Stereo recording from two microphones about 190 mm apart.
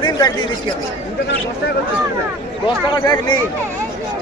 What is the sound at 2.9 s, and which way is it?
Speech, 20° left (ahead or behind).